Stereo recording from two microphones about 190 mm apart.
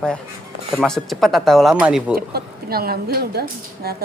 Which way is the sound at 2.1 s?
55° right (ahead or behind).